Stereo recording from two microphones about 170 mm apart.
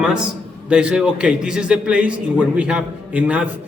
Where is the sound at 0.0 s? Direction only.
5° right (ahead or behind).